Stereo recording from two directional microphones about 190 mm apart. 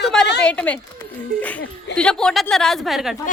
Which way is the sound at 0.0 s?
Centre (ahead or behind).